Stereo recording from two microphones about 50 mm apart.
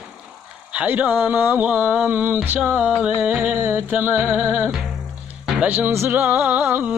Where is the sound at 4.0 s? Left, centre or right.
Right.